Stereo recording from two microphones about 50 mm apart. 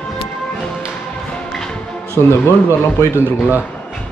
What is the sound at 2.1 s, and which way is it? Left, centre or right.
Speech, left.